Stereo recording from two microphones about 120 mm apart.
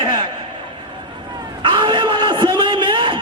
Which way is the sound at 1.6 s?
40° right (ahead or behind).